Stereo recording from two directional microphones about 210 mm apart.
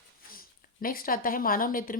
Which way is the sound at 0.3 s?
45° left (ahead or behind).